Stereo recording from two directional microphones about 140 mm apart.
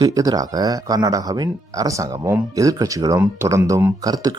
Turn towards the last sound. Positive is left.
turn(degrees=-25)  # may be behind; listen again after turning